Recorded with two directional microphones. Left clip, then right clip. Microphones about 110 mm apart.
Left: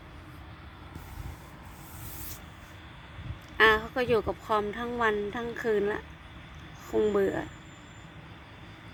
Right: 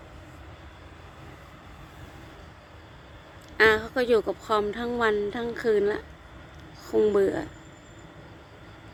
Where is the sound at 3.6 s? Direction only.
20° right (ahead or behind).